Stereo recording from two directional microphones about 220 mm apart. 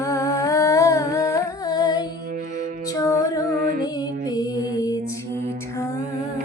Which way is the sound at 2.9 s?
15° left (ahead or behind).